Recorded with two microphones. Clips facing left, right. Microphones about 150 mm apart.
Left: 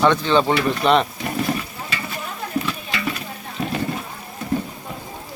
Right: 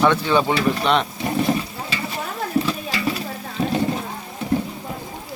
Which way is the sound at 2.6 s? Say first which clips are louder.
Right 3 dB; 30° right (ahead or behind).